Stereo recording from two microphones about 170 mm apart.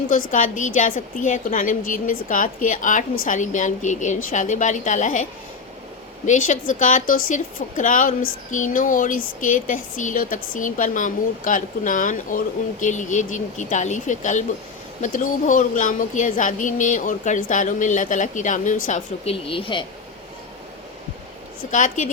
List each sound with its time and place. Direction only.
0.1 s a woman's voice: 50° left (ahead or behind)
6.2 s a woman's voice: 45° left (ahead or behind)
21.7 s a woman's voice: 45° left (ahead or behind)